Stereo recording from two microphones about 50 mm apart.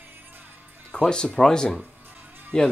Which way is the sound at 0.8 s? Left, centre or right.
Centre.